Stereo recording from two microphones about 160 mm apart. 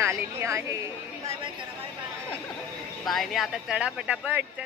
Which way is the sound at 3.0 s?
Centre (ahead or behind).